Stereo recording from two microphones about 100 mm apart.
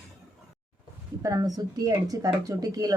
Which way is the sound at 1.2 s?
35° right (ahead or behind).